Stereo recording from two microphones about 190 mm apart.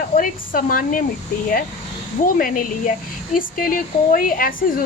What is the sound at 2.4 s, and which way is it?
A woman's voice, 45° left (ahead or behind).